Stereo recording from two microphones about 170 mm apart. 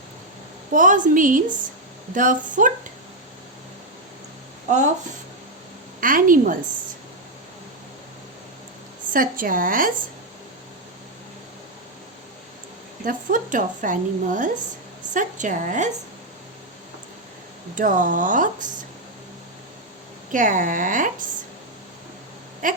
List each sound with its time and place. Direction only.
0.7 s a woman's voice: 50° right (ahead or behind)
6.0 s a woman's voice: 55° right (ahead or behind)
9.1 s speech: 55° right (ahead or behind)
13.1 s a woman's voice: 50° right (ahead or behind)
17.7 s a woman's voice: 50° right (ahead or behind)
20.3 s a woman's voice: 50° right (ahead or behind)
22.6 s a woman's voice: 50° right (ahead or behind)